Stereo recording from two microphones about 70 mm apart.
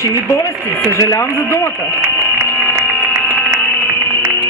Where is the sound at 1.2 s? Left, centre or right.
Left.